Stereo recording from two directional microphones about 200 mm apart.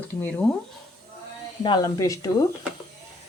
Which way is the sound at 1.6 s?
20° left (ahead or behind).